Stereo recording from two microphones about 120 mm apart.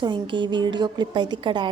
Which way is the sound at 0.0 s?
40° right (ahead or behind).